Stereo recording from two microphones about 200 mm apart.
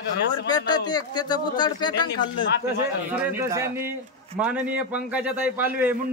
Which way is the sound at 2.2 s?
60° left (ahead or behind).